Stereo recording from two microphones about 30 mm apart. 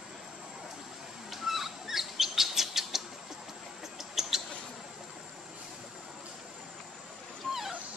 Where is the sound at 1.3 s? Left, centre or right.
Centre.